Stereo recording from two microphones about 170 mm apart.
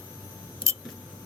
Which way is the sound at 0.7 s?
15° right (ahead or behind).